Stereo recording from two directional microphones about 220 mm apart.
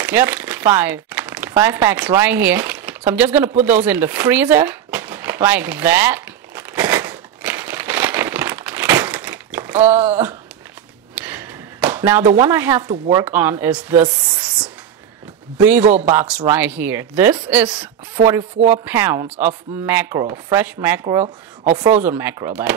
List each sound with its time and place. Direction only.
0.0 s speech: 10° right (ahead or behind)
3.6 s a sound: 5° right (ahead or behind)
11.1 s a sound: 5° right (ahead or behind)
12.4 s speech: 15° right (ahead or behind)
15.5 s speech: 5° right (ahead or behind)
15.8 s speech: 30° right (ahead or behind)
16.1 s speech: 10° right (ahead or behind)